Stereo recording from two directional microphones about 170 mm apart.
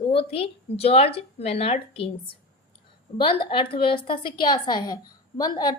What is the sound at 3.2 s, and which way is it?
A woman's voice, 30° left (ahead or behind).